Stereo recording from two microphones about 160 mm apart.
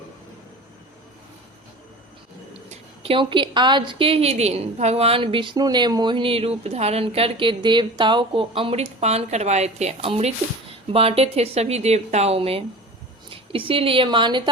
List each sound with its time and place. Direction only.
2.5 s a woman's voice: 35° right (ahead or behind)